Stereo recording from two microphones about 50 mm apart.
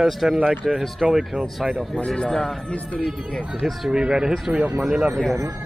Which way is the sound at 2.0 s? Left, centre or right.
Left.